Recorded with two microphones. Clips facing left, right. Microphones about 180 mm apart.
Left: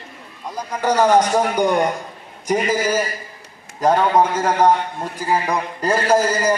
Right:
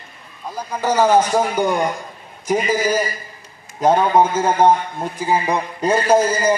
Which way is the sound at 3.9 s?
25° right (ahead or behind).